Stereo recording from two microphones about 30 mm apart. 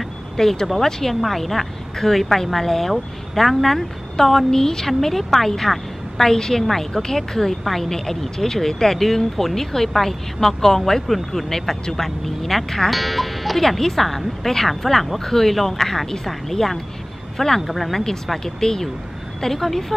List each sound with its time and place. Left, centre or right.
0.4 s speech: centre
1.2 s speech: centre
18.4 s speech: centre